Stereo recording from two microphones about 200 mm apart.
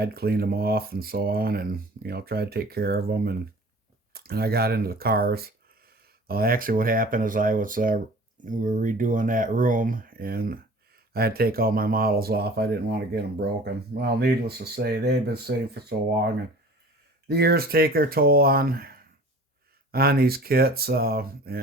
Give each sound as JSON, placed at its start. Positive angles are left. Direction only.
{"t": 0.0, "sound": "speech", "side_deg": -50}
{"t": 17.2, "sound": "speech", "side_deg": -50}